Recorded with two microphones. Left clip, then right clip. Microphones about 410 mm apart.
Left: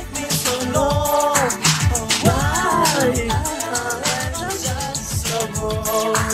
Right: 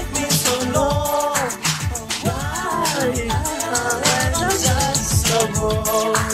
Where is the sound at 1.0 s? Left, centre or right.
Centre.